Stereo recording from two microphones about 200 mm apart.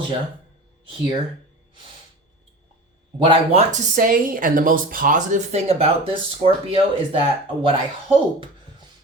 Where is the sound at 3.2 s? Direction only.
25° right (ahead or behind).